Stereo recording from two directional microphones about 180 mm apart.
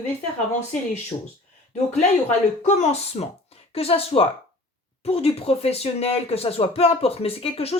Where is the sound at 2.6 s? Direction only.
40° left (ahead or behind).